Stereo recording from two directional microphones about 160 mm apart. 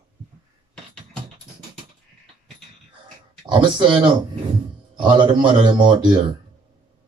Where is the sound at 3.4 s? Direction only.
30° right (ahead or behind).